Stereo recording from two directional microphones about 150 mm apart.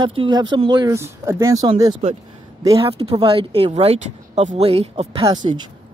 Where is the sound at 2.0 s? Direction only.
40° right (ahead or behind).